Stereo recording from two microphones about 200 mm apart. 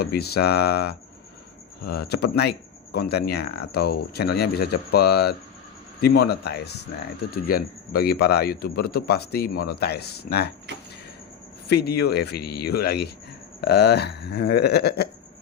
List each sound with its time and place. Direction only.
0.0 s speech: 50° left (ahead or behind)
11.7 s speech: 55° left (ahead or behind)